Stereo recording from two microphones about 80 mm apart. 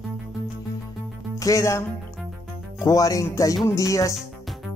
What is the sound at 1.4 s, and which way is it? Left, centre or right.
Speech, left.